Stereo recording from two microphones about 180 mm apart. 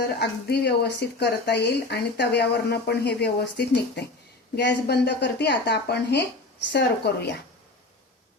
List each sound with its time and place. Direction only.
0.2 s speech: 65° left (ahead or behind)